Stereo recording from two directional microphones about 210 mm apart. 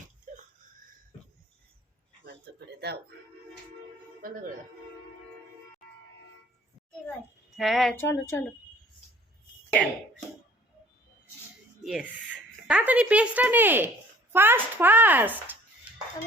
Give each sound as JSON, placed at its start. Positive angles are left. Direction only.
{"t": 0.3, "sound": "wheeze", "side_deg": -40}
{"t": 2.2, "sound": "speech", "side_deg": -50}
{"t": 4.2, "sound": "speech", "side_deg": -40}
{"t": 7.5, "sound": "a sound", "side_deg": 0}
{"t": 8.1, "sound": "speech", "side_deg": 10}
{"t": 11.8, "sound": "speech", "side_deg": 0}